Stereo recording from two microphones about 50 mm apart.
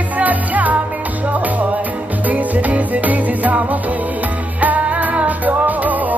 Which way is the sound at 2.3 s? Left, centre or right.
Right.